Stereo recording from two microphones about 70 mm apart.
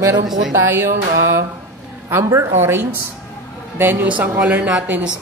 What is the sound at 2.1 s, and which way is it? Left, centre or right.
A man's voice, right.